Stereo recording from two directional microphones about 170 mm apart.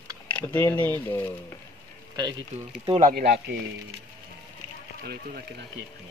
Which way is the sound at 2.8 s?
35° right (ahead or behind).